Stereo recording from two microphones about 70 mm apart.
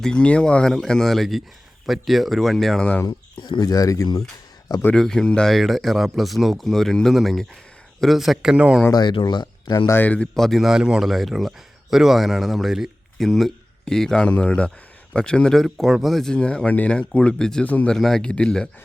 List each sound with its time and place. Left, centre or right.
0.0 s speech: centre
3.1 s speech: left
4.9 s speech: centre
5.5 s speech: centre
8.9 s speech: left
10.0 s speech: centre
10.3 s speech: centre
17.7 s speech: left
17.9 s speech: centre